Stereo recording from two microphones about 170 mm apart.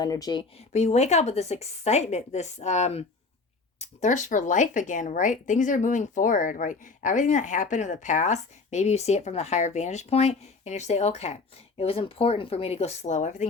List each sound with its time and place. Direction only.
0.0 s speech: 20° left (ahead or behind)
0.5 s a woman's voice: 40° left (ahead or behind)